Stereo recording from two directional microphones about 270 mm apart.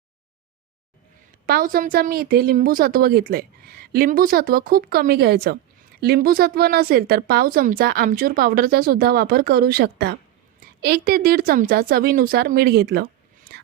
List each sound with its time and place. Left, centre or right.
1.5 s a woman's voice: right